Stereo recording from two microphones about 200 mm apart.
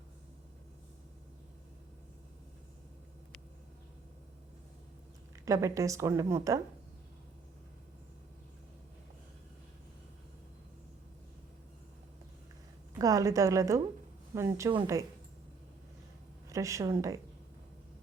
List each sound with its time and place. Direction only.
5.5 s a woman's voice: 15° right (ahead or behind)
13.0 s a woman's voice: 15° right (ahead or behind)
16.5 s a woman's voice: 15° right (ahead or behind)